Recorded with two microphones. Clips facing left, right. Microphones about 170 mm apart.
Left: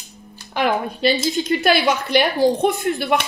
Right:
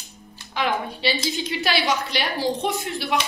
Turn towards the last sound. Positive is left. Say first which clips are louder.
# left 5 dB
turn(degrees=55)  # may be behind; listen again after turning